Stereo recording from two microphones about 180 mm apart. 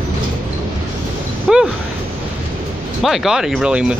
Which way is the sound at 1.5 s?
5° right (ahead or behind).